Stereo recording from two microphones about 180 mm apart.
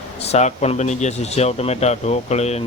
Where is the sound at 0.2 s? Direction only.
35° left (ahead or behind).